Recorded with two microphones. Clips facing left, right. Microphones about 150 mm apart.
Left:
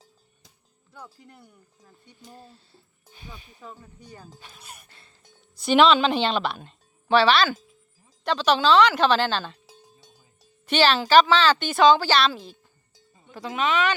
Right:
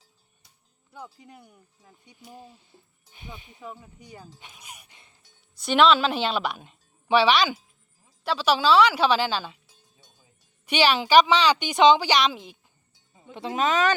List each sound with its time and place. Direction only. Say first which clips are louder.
0.9 s speech: right 2 dB; 15° right (ahead or behind)
4.4 s music: left 1 dB; 15° right (ahead or behind)
5.6 s speech: left 2 dB; centre (ahead or behind)
10.7 s speech: left 1 dB; 10° right (ahead or behind)
13.3 s speech: right 2 dB; 25° right (ahead or behind)
13.6 s speech: right 1 dB; 40° right (ahead or behind)